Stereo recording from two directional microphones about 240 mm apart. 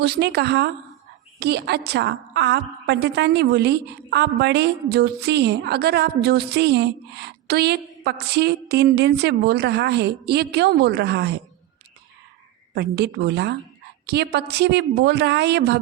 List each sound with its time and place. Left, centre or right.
0.0 s a woman's voice: right
12.7 s a woman's voice: right